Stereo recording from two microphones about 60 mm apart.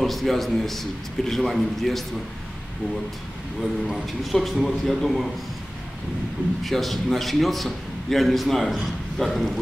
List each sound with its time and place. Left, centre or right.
0.0 s a man's voice: centre
3.8 s a man's voice: centre
6.6 s a man's voice: centre